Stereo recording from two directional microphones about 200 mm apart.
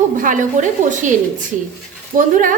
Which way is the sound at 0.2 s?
40° right (ahead or behind).